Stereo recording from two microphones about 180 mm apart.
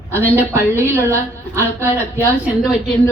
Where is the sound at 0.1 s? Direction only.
15° right (ahead or behind).